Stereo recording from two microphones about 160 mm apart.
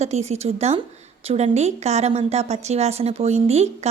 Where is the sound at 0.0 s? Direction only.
45° right (ahead or behind).